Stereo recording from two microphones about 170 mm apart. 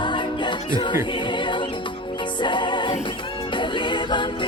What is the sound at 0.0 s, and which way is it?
Music, 30° left (ahead or behind).